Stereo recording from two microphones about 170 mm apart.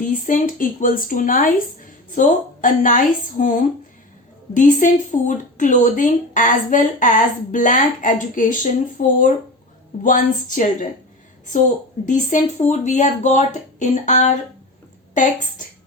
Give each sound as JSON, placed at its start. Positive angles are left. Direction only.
{"t": 0.0, "sound": "speech", "side_deg": 50}
{"t": 4.5, "sound": "speech", "side_deg": 50}
{"t": 12.0, "sound": "speech", "side_deg": 45}